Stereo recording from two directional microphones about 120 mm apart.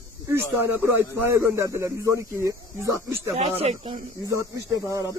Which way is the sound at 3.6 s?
55° right (ahead or behind).